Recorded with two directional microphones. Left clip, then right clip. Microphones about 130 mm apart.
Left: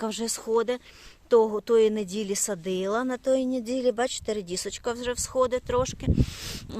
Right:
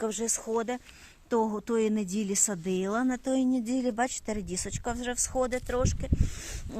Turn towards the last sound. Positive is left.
turn(degrees=45)  # may be behind; listen again after turning